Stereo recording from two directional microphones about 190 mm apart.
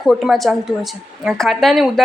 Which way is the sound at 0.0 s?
Centre (ahead or behind).